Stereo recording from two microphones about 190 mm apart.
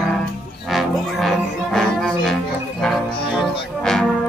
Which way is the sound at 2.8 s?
Centre (ahead or behind).